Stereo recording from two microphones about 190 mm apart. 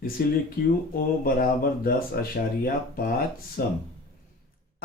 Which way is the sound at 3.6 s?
55° left (ahead or behind).